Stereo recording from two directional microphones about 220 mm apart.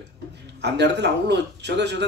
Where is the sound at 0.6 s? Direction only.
50° right (ahead or behind).